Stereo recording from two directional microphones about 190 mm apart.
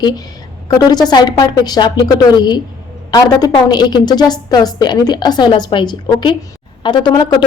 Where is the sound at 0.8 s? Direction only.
20° left (ahead or behind).